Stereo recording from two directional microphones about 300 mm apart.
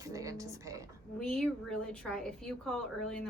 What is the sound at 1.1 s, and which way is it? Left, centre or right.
A woman's voice, centre.